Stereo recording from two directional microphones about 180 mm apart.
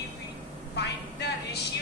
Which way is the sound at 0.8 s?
70° left (ahead or behind).